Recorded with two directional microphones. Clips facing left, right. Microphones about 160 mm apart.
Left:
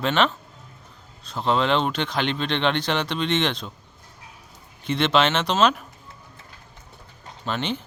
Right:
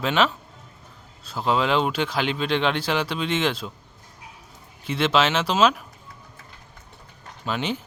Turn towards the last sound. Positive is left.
turn(degrees=-5)  # may be behind; listen again after turning